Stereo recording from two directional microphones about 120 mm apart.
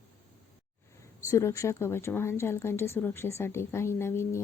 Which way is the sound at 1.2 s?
25° left (ahead or behind).